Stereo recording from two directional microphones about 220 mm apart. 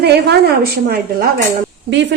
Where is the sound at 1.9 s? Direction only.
55° right (ahead or behind).